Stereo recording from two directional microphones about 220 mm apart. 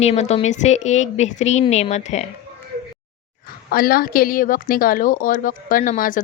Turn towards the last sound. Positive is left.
turn(degrees=35)  # may be behind; listen again after turning